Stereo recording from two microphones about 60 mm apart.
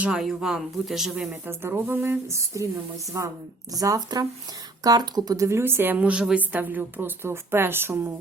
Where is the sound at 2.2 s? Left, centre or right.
Right.